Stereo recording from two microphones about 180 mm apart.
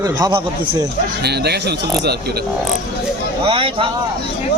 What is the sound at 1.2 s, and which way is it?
Speech, 65° right (ahead or behind).